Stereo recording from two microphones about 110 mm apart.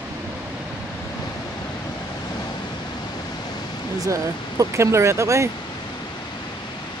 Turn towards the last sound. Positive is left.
turn(degrees=-25)  # may be behind; listen again after turning